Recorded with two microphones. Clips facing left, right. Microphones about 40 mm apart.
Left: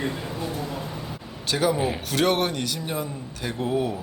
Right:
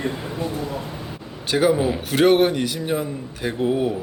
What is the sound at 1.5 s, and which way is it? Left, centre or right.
A man's voice, right.